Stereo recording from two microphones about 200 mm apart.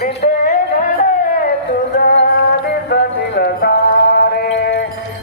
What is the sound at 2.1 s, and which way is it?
Music, 55° left (ahead or behind).